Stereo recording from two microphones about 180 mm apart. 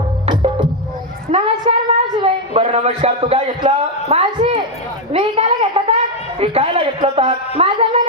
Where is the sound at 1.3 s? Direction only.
30° right (ahead or behind).